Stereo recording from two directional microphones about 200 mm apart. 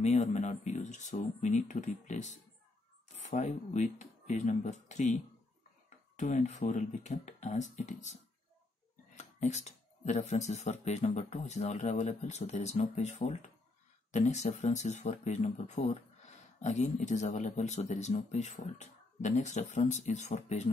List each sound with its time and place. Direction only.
0.0 s speech: 35° left (ahead or behind)